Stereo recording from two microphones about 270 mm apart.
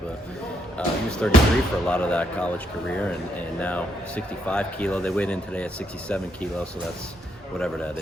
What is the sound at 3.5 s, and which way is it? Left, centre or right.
Speech, centre.